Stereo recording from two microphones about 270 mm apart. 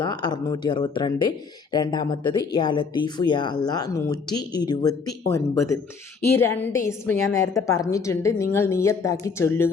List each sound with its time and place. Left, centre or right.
0.0 s a woman's voice: centre